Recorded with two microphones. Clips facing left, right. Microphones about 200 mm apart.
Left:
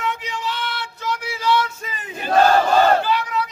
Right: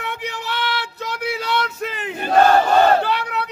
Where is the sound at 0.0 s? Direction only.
60° right (ahead or behind).